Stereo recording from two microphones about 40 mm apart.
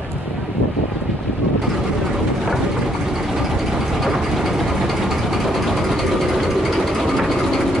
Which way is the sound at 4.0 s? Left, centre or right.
Centre.